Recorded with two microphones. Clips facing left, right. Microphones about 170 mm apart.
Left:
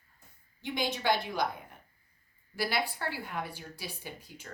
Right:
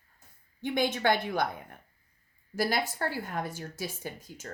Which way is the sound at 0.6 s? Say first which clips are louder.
Right 4 dB; 55° right (ahead or behind).